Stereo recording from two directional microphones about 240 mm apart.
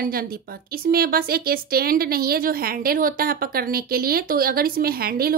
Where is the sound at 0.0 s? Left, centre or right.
Right.